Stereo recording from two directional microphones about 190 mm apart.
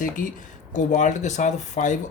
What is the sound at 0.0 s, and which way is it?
Speech, 45° left (ahead or behind).